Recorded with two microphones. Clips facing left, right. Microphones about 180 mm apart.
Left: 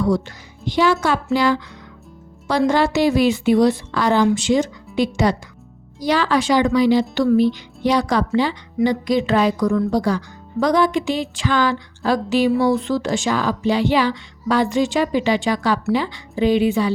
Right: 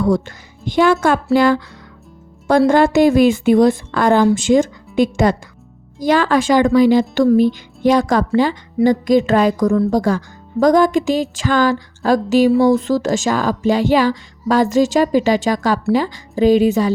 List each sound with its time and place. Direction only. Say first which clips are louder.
0.0 s a woman's voice: right 3 dB; 50° right (ahead or behind)